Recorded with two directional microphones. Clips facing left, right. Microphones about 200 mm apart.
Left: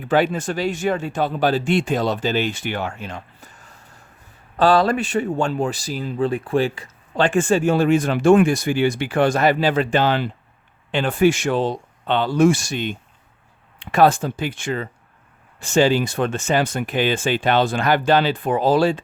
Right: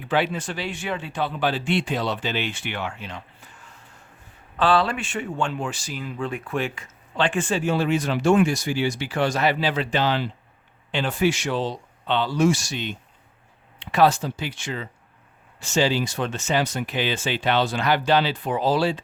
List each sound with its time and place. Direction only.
0.0 s speech: 45° left (ahead or behind)